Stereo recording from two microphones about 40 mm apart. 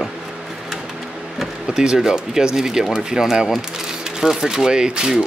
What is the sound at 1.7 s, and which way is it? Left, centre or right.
Speech, centre.